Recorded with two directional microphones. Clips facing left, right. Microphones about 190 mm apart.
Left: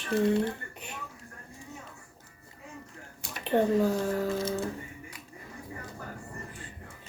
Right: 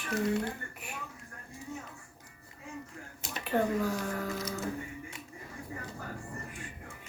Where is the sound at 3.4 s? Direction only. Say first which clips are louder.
Left 5 dB; 25° left (ahead or behind).